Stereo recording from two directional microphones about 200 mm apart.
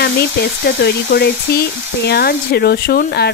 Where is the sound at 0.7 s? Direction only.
55° left (ahead or behind).